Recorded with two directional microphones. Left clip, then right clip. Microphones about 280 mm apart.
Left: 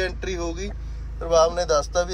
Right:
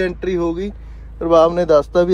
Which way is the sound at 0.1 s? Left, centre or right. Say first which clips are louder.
Right 10 dB; right.